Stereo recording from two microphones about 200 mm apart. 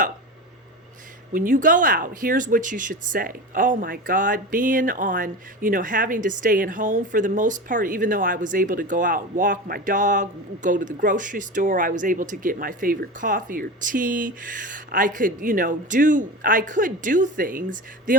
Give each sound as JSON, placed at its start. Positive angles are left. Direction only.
{"t": 1.3, "sound": "speech", "side_deg": -40}